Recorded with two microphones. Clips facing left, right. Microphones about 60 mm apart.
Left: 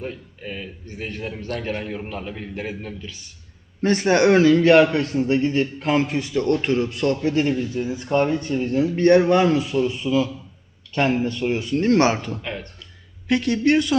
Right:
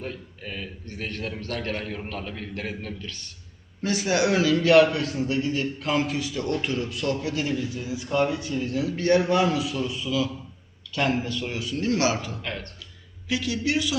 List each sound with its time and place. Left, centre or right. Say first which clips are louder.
0.0 s a man's voice: left 3 dB; centre
3.8 s speech: left 6 dB; left
12.4 s a man's voice: left 2 dB; centre
13.2 s a man's voice: left 7 dB; left